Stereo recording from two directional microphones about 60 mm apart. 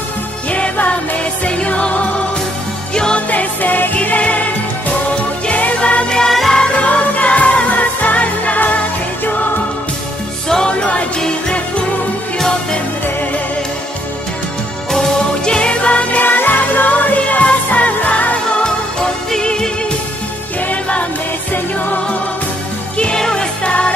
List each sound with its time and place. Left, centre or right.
0.5 s music: left
3.3 s music: left
5.5 s music: left; by 6.6 s centre
6.6 s music: centre
10.5 s music: centre
14.9 s music: centre
20.6 s music: left
22.9 s music: centre